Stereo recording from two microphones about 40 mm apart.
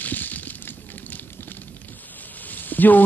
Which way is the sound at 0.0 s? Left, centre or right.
Left.